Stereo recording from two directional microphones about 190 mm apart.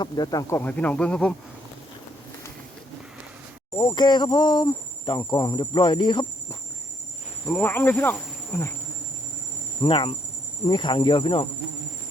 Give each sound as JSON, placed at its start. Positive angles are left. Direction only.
{"t": 0.0, "sound": "speech", "side_deg": 20}
{"t": 3.8, "sound": "speech", "side_deg": 25}
{"t": 7.4, "sound": "speech", "side_deg": 10}
{"t": 9.8, "sound": "speech", "side_deg": 25}